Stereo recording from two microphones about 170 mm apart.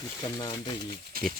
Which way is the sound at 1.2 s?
60° right (ahead or behind).